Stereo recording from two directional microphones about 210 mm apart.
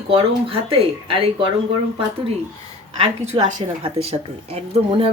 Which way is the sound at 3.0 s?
30° right (ahead or behind).